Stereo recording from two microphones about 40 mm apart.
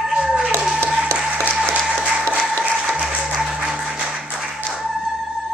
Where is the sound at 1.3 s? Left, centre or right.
Right.